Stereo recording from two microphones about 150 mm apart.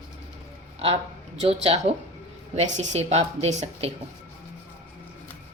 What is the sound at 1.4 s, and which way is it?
A woman's voice, 45° right (ahead or behind).